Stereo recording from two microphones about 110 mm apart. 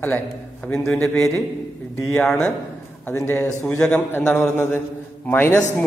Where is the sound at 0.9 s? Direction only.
5° left (ahead or behind).